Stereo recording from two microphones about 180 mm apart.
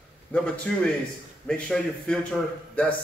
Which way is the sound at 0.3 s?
5° left (ahead or behind).